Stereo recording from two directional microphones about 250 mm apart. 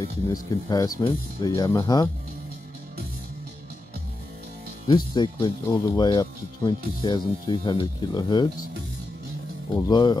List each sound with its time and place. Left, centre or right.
0.0 s speech: centre
4.8 s speech: centre
9.8 s speech: centre